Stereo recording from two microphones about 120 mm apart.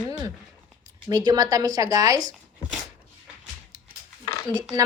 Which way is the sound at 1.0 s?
30° right (ahead or behind).